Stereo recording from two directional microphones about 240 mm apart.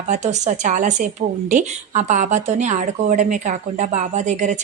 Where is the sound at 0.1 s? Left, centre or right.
Right.